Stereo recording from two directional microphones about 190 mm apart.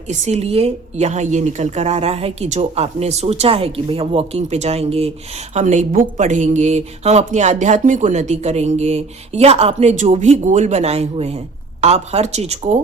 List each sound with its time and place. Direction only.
0.1 s a woman's voice: 35° right (ahead or behind)